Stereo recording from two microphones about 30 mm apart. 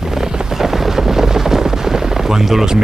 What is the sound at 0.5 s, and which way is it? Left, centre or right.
Gunshot, centre.